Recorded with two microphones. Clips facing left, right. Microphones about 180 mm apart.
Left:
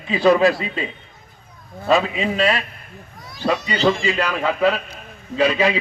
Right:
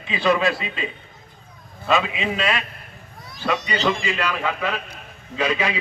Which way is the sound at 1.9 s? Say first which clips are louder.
Left 3 dB; 40° left (ahead or behind).